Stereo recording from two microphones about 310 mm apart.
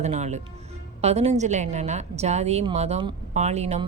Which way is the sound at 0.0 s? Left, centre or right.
Right.